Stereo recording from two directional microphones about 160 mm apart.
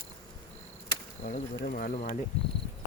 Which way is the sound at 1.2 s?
55° left (ahead or behind).